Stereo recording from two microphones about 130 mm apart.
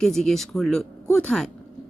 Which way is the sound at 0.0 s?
5° left (ahead or behind).